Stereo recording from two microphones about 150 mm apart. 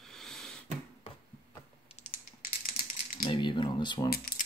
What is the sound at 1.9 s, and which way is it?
Typing, 40° left (ahead or behind).